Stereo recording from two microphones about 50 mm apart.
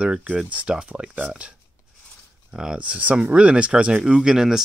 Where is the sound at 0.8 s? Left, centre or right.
Centre.